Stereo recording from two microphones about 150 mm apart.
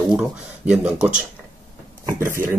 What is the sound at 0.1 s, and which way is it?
Speech, 5° right (ahead or behind).